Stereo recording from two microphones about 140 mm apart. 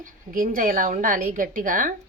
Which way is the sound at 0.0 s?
75° right (ahead or behind).